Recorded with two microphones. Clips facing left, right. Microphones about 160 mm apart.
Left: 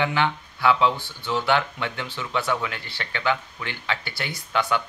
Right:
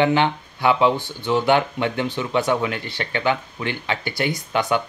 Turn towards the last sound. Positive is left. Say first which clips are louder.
# right 3 dB
turn(degrees=-20)  # may be behind; listen again after turning